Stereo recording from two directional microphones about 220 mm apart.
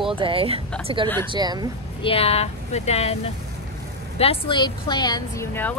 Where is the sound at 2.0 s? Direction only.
25° left (ahead or behind).